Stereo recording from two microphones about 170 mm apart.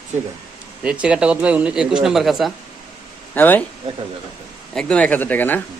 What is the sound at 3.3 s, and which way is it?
Speech, 10° left (ahead or behind).